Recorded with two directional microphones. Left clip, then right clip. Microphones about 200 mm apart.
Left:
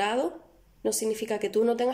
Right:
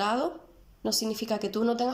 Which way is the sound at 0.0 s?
15° left (ahead or behind).